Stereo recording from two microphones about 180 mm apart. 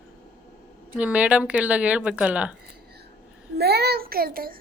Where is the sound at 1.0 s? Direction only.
5° right (ahead or behind).